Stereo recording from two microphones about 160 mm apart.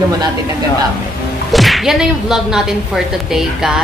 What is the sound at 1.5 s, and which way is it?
Speech, centre (ahead or behind).